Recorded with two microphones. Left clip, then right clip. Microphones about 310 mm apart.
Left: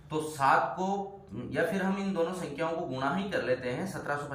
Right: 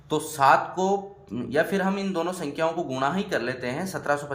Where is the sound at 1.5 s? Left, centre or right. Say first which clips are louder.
Right 6 dB; right.